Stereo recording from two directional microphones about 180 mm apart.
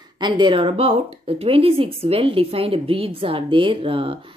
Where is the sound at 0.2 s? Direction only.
25° right (ahead or behind).